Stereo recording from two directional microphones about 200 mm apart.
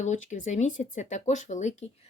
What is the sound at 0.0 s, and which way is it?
Speech, 35° left (ahead or behind).